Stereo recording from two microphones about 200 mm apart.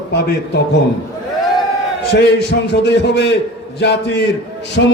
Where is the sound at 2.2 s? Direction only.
60° left (ahead or behind).